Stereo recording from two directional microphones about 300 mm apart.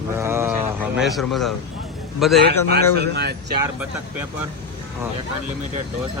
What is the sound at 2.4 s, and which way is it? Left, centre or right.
Speech, right.